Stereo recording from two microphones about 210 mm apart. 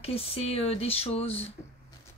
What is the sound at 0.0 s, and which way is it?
Speech, 30° left (ahead or behind).